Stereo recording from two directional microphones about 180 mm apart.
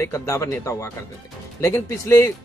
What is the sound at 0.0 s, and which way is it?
Speech, 15° left (ahead or behind).